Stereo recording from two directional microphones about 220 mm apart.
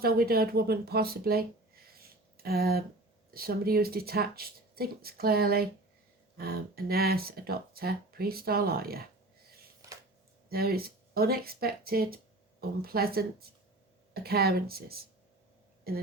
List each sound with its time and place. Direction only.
0.0 s speech: 45° right (ahead or behind)
10.5 s speech: 45° right (ahead or behind)